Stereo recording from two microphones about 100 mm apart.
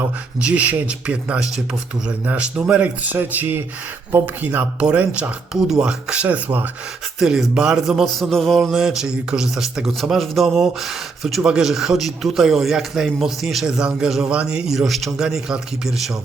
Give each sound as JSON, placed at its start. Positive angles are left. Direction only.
{"t": 0.4, "sound": "speech", "side_deg": -15}
{"t": 7.2, "sound": "speech", "side_deg": -5}